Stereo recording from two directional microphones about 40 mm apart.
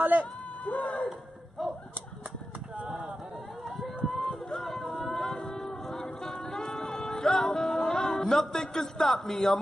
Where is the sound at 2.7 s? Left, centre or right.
Right.